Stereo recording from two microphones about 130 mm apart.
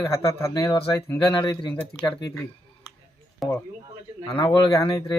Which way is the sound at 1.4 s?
35° left (ahead or behind).